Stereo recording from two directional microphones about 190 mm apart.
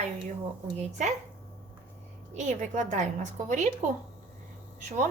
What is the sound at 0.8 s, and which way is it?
Speech, 40° right (ahead or behind).